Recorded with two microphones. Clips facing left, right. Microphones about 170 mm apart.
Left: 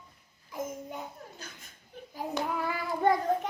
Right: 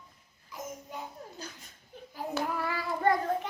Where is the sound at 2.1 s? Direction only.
15° left (ahead or behind).